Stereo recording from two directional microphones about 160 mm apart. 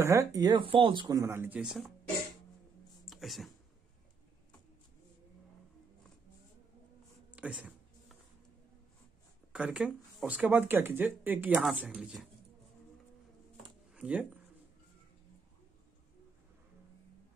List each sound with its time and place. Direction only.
0.0 s speech: 20° right (ahead or behind)
1.2 s speech: 15° right (ahead or behind)
3.1 s a sound: centre (ahead or behind)
7.3 s a sound: 10° right (ahead or behind)
9.5 s speech: 5° right (ahead or behind)
13.9 s speech: 10° right (ahead or behind)